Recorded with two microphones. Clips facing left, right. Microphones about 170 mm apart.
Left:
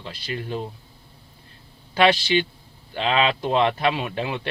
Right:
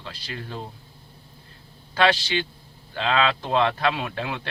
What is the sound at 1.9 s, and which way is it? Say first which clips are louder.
Speech: left 3 dB; 20° left (ahead or behind).